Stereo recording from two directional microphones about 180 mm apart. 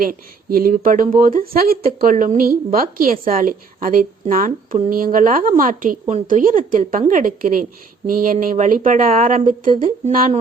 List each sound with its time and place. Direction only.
0.0 s a woman's voice: 55° right (ahead or behind)